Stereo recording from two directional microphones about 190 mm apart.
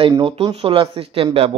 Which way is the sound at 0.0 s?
30° right (ahead or behind).